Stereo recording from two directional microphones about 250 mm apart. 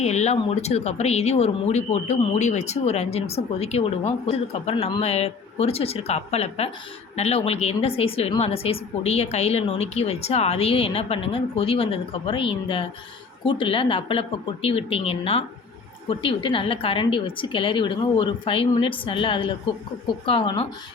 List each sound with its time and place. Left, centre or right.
0.0 s speech: left